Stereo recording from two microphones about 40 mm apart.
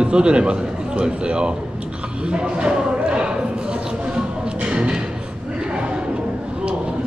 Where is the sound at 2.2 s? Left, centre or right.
Right.